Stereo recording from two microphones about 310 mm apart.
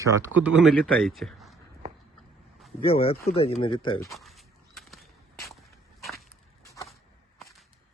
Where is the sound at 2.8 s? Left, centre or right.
Centre.